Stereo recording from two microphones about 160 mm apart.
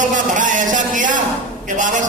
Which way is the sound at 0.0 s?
55° right (ahead or behind).